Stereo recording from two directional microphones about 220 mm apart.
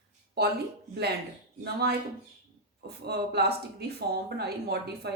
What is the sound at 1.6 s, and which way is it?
A woman's voice, 45° right (ahead or behind).